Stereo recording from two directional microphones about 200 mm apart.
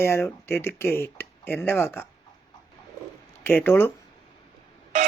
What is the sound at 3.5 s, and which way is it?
Speech, 10° left (ahead or behind).